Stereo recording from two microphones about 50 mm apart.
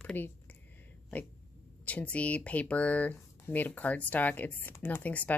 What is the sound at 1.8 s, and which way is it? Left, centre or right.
Speech, left.